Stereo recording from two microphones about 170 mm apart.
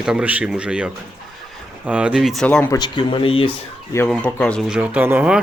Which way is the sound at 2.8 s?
30° left (ahead or behind).